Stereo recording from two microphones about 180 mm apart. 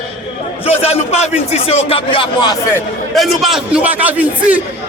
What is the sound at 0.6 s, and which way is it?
A man's voice, 35° left (ahead or behind).